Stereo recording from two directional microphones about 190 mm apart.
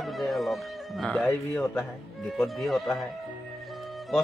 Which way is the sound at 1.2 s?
10° left (ahead or behind).